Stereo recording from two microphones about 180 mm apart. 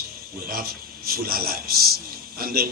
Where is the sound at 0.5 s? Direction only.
55° right (ahead or behind).